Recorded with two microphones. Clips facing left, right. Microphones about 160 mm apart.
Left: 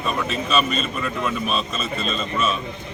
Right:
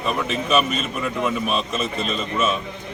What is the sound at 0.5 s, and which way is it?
A man's voice, 10° right (ahead or behind).